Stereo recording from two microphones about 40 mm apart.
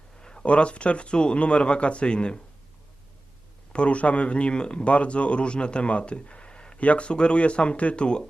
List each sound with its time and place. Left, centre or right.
0.2 s a sound: centre
0.4 s a man's voice: left
3.7 s a man's voice: left